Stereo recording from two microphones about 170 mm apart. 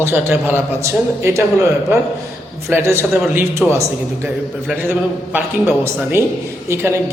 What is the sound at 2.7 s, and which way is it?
Speech, 15° right (ahead or behind).